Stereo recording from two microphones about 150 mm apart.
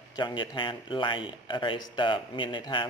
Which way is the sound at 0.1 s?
30° left (ahead or behind).